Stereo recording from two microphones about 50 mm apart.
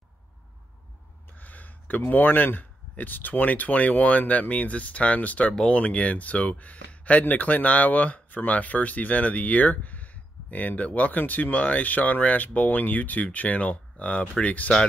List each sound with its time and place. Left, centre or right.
1.3 s speech: left